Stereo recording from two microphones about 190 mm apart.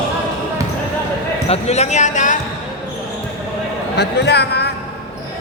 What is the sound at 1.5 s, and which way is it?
Speech, 35° left (ahead or behind).